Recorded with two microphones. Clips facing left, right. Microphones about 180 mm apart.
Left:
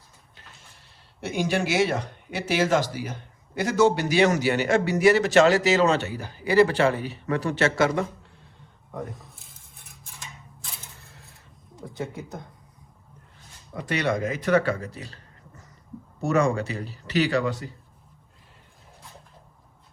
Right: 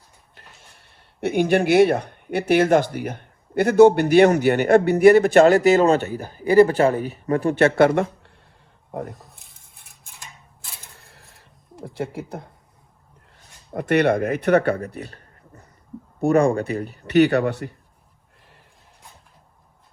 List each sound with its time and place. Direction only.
0.3 s speech: 60° right (ahead or behind)
9.0 s speech: centre (ahead or behind)
10.9 s a sound: 60° right (ahead or behind)
13.7 s speech: 55° right (ahead or behind)
16.2 s speech: 55° right (ahead or behind)